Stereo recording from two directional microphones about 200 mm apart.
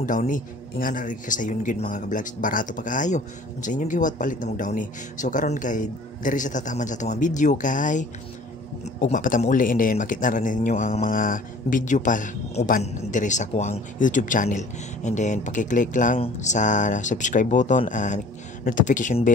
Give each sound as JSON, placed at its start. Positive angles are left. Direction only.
{"t": 0.0, "sound": "a man's voice", "side_deg": 40}